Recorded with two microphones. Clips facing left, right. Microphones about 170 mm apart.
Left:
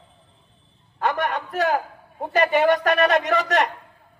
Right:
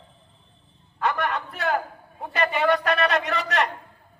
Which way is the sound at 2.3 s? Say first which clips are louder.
Left 4 dB; 45° left (ahead or behind).